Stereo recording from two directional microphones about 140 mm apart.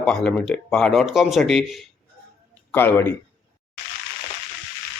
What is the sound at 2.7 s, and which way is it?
Speech, 15° left (ahead or behind).